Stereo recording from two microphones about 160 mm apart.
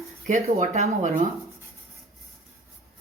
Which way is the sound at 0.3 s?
50° right (ahead or behind).